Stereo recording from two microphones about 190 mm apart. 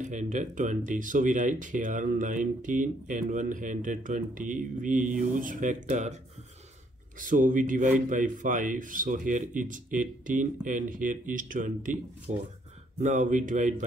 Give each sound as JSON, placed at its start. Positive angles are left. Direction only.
{"t": 0.0, "sound": "speech", "side_deg": -40}
{"t": 7.2, "sound": "speech", "side_deg": -45}